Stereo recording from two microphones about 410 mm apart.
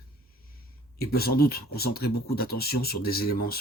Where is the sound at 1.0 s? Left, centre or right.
Left.